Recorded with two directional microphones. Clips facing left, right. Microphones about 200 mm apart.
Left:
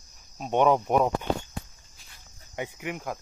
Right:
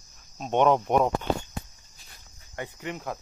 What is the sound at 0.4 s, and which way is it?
Speech, 5° left (ahead or behind).